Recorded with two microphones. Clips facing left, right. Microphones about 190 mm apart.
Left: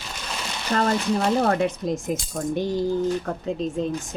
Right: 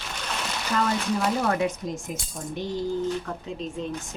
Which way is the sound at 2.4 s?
60° left (ahead or behind).